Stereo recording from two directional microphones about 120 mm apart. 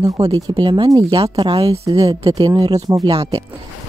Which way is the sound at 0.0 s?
30° right (ahead or behind).